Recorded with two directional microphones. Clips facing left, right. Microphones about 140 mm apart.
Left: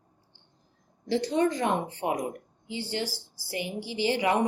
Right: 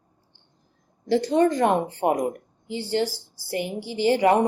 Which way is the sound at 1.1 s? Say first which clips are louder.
Right 5 dB; 50° right (ahead or behind).